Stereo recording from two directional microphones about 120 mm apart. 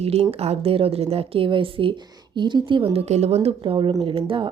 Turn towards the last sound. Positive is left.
turn(degrees=-45)  # may be behind; listen again after turning